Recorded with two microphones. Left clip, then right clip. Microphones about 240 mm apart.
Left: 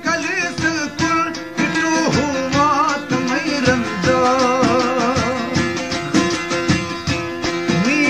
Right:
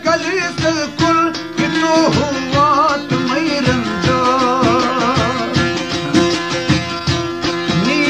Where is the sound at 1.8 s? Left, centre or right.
Centre.